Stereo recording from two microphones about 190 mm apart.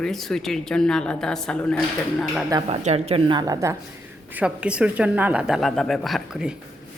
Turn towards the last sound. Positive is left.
turn(degrees=-5)  # may be behind; listen again after turning